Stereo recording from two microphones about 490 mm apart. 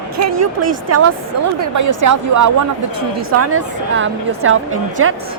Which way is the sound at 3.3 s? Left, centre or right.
Right.